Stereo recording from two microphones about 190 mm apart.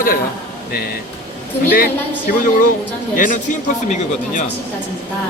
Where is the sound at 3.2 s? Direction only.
40° left (ahead or behind).